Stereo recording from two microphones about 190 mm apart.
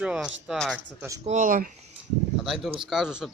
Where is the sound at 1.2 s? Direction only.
40° right (ahead or behind).